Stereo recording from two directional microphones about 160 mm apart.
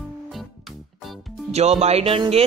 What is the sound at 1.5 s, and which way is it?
Speech, 40° right (ahead or behind).